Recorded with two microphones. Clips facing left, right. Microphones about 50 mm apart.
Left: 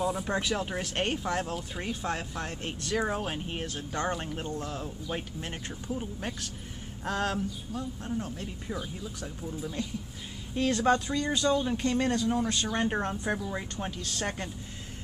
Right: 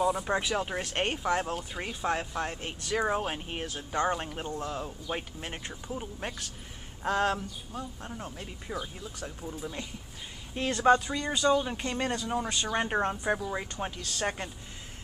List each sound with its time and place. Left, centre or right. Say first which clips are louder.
0.0 s speech: right 2 dB; centre